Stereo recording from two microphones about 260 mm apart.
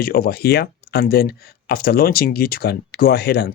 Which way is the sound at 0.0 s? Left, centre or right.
Left.